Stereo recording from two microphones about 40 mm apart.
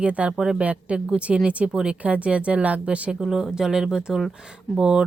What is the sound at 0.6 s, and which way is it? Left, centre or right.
Speech, right.